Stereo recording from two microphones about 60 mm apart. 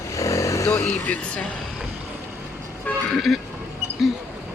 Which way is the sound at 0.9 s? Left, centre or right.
Left.